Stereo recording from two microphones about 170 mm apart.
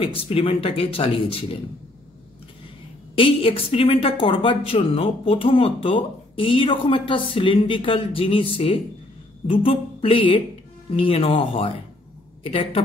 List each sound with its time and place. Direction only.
0.0 s speech: 30° left (ahead or behind)
3.2 s speech: 30° left (ahead or behind)